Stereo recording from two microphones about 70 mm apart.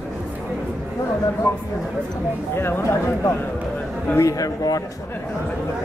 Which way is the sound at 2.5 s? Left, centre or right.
Left.